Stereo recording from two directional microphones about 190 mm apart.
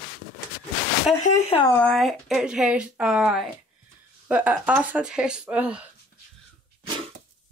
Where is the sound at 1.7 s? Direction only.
5° left (ahead or behind).